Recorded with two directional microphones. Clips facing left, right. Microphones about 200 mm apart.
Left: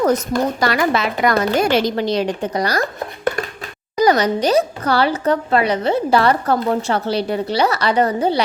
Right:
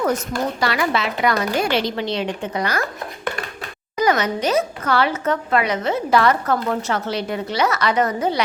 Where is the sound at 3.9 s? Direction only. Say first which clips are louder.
Left 4 dB; 35° left (ahead or behind).